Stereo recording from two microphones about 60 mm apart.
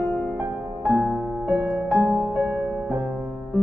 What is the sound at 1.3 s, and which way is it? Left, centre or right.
Music, right.